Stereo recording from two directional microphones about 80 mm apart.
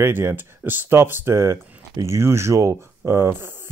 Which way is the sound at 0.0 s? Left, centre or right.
Right.